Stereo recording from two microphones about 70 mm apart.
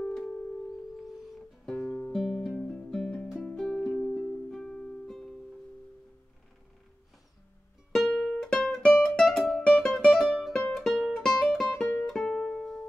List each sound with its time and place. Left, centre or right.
0.0 s music: centre
1.9 s music: centre
2.1 s music: centre
8.1 s music: centre
11.1 s music: centre